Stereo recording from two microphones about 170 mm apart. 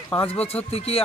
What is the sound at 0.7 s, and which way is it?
Speech, 35° left (ahead or behind).